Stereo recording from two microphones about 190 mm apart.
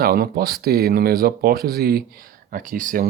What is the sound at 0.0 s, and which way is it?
Speech, 55° right (ahead or behind).